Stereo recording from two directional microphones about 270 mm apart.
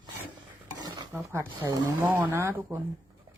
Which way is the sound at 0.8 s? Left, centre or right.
Centre.